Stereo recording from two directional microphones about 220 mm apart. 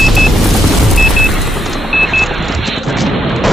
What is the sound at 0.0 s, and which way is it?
Vehicle, centre (ahead or behind).